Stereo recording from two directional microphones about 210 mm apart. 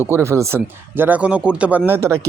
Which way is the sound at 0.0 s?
15° right (ahead or behind).